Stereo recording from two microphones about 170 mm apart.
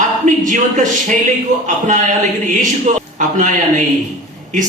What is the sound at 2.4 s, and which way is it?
Speech, 50° right (ahead or behind).